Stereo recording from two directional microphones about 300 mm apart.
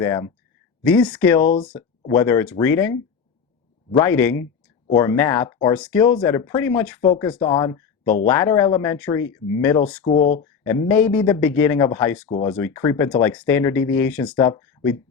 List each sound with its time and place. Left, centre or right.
0.0 s speech: centre
7.4 s speech: centre
8.0 s speech: left
8.3 s speech: centre
10.0 s speech: left
10.7 s speech: centre
12.3 s speech: left
12.5 s speech: centre